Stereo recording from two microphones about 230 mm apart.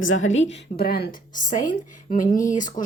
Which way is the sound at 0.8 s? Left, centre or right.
Left.